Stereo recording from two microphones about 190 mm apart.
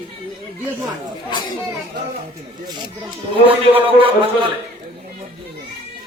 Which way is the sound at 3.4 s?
30° right (ahead or behind).